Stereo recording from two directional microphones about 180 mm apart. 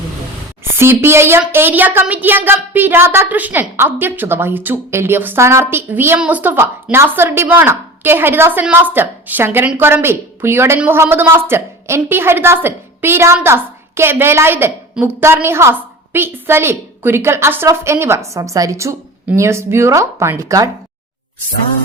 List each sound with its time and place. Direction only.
0.6 s a woman's voice: 15° right (ahead or behind)